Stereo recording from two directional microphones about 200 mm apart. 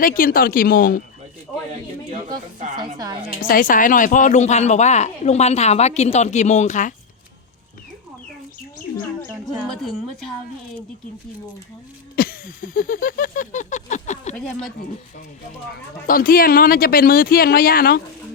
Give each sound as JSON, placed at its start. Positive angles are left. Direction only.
{"t": 0.0, "sound": "speech", "side_deg": 45}
{"t": 3.0, "sound": "a woman's voice", "side_deg": -20}
{"t": 3.4, "sound": "speech", "side_deg": 45}
{"t": 9.8, "sound": "a woman's voice", "side_deg": 0}
{"t": 12.1, "sound": "a sound", "side_deg": 45}
{"t": 14.3, "sound": "a woman's voice", "side_deg": 0}
{"t": 16.0, "sound": "speech", "side_deg": 45}